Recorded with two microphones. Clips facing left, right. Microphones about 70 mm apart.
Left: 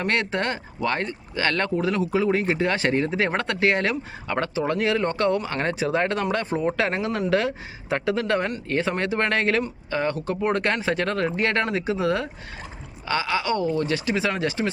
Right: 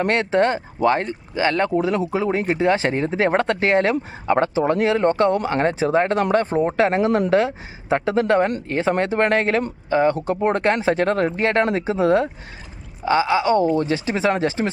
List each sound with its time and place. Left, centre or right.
0.0 s speech: right